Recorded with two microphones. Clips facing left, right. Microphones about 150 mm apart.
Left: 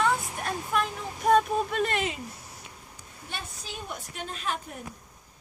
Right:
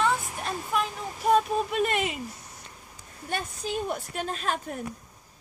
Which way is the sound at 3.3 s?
45° right (ahead or behind).